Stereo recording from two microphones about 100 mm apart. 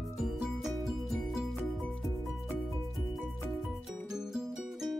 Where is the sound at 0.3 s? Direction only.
Centre (ahead or behind).